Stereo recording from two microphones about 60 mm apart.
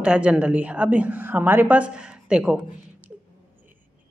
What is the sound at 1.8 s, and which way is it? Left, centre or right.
Speech, centre.